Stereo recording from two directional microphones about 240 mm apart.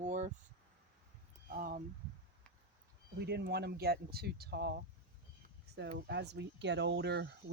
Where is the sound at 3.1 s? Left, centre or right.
Right.